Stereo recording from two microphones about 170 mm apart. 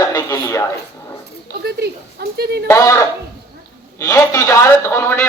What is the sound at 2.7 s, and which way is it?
A man's voice, 15° left (ahead or behind).